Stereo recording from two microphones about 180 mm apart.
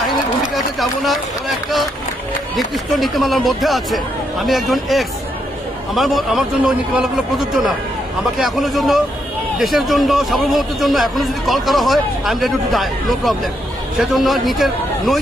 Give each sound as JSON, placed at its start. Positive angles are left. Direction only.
{"t": 0.5, "sound": "run", "side_deg": 0}
{"t": 2.6, "sound": "a man's voice", "side_deg": 0}